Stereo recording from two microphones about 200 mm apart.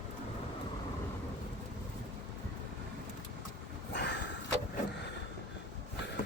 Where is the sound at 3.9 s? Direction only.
60° left (ahead or behind).